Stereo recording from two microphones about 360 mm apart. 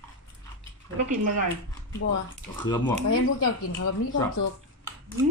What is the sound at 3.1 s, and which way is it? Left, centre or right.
Speech, left.